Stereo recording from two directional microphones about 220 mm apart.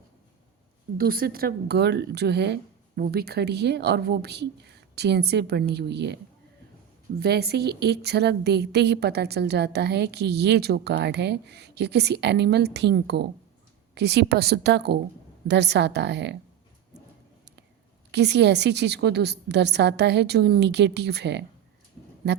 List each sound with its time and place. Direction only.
0.9 s a woman's voice: 40° right (ahead or behind)
7.2 s a woman's voice: 45° right (ahead or behind)
18.1 s a woman's voice: 50° right (ahead or behind)